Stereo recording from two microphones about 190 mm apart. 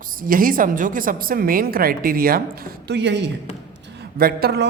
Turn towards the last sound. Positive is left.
turn(degrees=-55)  # may be behind; listen again after turning